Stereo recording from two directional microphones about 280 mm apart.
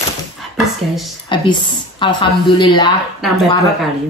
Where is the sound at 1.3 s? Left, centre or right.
Centre.